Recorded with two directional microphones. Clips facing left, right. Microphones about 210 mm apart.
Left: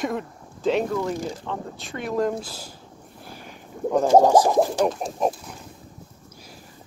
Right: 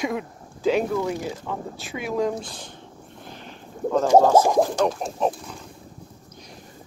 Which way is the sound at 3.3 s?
10° left (ahead or behind).